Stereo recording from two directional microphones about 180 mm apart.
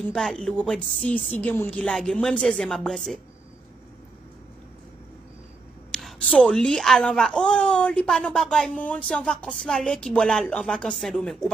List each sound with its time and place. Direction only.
0.0 s a woman's voice: centre (ahead or behind)
5.9 s a woman's voice: centre (ahead or behind)